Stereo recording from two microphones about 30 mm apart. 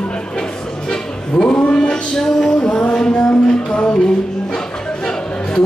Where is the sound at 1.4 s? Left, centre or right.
Left.